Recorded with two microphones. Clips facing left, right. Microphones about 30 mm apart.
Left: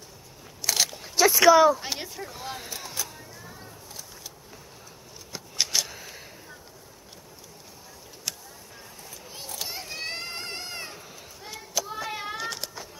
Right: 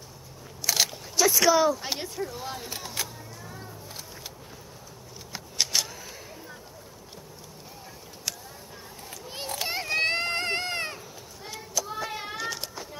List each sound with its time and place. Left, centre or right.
0.7 s biting: centre
1.0 s speech: centre
3.0 s a sound: right
5.3 s scissors: centre
5.9 s a sound: centre
9.3 s children playing: right
11.8 s child singing: centre